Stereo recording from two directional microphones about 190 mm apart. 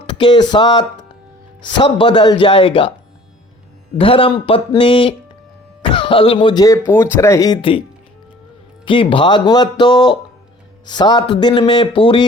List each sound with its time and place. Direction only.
0.1 s speech: 25° left (ahead or behind)
3.9 s speech: 30° left (ahead or behind)
8.8 s speech: 25° left (ahead or behind)